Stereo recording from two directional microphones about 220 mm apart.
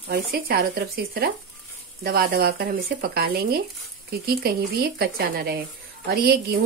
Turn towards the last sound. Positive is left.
turn(degrees=-45)  # may be behind; listen again after turning